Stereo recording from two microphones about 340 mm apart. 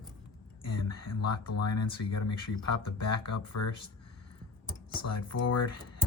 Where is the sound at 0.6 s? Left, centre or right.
Left.